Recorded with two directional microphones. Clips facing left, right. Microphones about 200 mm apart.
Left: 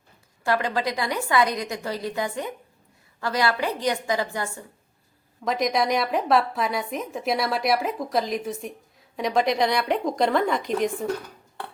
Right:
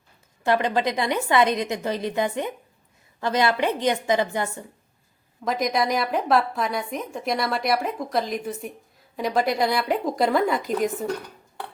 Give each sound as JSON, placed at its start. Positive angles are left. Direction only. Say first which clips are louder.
{"t": 0.4, "sound": "a woman's voice", "louder": "right 3 dB", "side_deg": -20}
{"t": 5.5, "sound": "a woman's voice", "louder": "even", "side_deg": 0}